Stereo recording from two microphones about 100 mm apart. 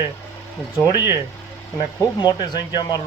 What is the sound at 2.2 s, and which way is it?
Speech, 45° left (ahead or behind).